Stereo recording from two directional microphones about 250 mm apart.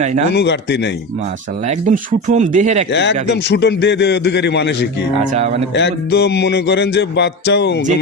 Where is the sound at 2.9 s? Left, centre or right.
Left.